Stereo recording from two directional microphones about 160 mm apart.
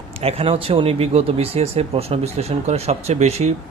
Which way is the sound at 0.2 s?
40° right (ahead or behind).